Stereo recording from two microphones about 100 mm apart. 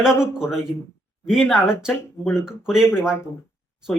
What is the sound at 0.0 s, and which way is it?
Speech, 5° right (ahead or behind).